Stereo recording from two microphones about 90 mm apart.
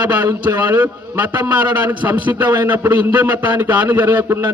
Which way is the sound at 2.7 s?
20° right (ahead or behind).